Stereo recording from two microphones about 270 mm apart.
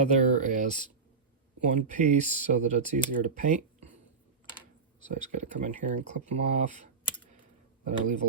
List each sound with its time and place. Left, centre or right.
0.1 s speech: right
5.0 s speech: right